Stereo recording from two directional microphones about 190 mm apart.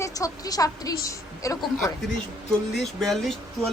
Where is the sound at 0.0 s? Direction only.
20° left (ahead or behind).